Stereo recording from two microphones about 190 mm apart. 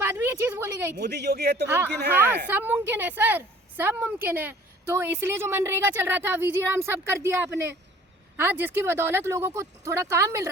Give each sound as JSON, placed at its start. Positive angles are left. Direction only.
{"t": 0.0, "sound": "a sound", "side_deg": -10}
{"t": 0.9, "sound": "a man's voice", "side_deg": -60}
{"t": 2.5, "sound": "a woman's voice", "side_deg": -10}